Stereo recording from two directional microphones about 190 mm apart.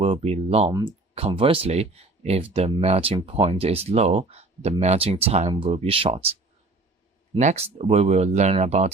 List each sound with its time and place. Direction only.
0.0 s speech: 30° right (ahead or behind)
7.3 s speech: 40° right (ahead or behind)